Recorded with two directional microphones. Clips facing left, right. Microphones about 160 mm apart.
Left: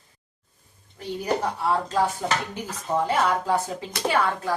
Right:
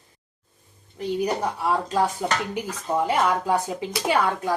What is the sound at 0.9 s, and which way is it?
A woman's voice, 15° right (ahead or behind).